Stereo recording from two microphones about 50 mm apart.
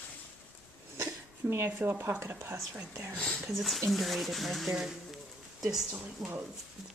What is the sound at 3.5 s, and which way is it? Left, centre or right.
Speech, centre.